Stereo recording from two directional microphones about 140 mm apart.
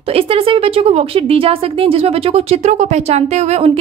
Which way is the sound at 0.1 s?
45° right (ahead or behind).